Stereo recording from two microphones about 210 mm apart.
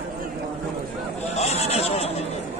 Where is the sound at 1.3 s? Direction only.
30° left (ahead or behind).